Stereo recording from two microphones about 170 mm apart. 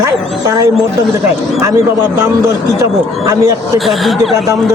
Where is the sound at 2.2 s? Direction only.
15° right (ahead or behind).